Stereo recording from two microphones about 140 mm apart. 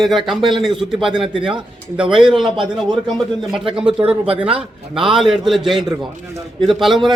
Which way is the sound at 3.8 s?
40° right (ahead or behind).